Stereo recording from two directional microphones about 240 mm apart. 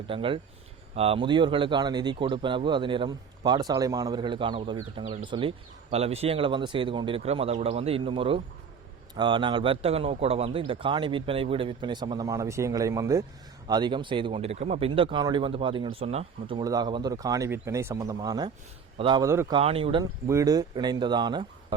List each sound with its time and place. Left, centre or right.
0.1 s speech: right
19.5 s speech: right